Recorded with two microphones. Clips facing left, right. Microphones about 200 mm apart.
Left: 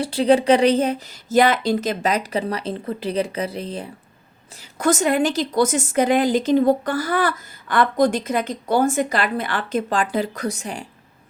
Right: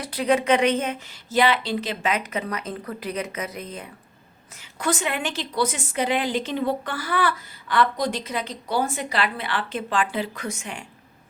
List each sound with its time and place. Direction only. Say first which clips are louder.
0.0 s speech: left 6 dB; 30° left (ahead or behind)
4.8 s a woman's voice: left 8 dB; 45° left (ahead or behind)